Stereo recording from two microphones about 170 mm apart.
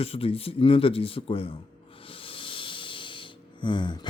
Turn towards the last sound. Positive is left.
turn(degrees=25)  # may be behind; listen again after turning